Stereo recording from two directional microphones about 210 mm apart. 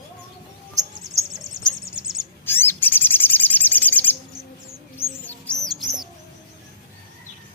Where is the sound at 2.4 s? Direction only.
10° left (ahead or behind).